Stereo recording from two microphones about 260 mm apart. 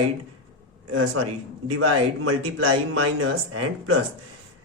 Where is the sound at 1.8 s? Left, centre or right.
Right.